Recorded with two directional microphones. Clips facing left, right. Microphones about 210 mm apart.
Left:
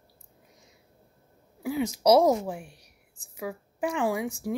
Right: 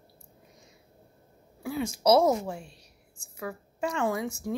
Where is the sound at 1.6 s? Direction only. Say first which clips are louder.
Left 2 dB; 15° left (ahead or behind).